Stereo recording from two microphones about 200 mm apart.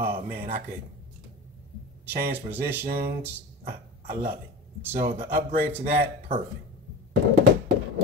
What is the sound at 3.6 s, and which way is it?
Speech, 45° right (ahead or behind).